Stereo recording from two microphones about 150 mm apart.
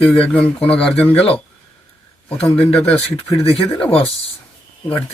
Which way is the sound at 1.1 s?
40° left (ahead or behind).